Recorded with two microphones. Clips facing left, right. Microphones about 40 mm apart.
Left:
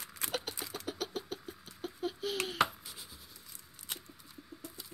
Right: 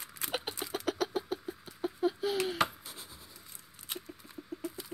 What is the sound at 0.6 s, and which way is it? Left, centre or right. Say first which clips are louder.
Chicken: right 5 dB; right.